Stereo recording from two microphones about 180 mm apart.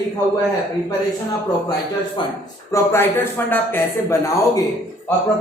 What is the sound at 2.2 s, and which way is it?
Speech, 25° left (ahead or behind).